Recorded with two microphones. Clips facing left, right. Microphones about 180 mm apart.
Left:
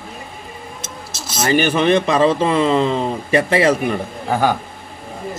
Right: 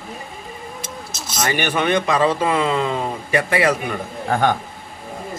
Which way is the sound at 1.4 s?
30° left (ahead or behind).